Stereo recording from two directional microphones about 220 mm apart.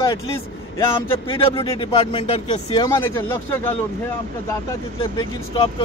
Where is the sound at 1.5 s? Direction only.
25° left (ahead or behind).